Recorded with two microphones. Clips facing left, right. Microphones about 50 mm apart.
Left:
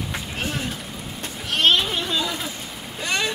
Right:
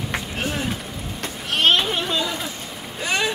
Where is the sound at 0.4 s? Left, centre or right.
Centre.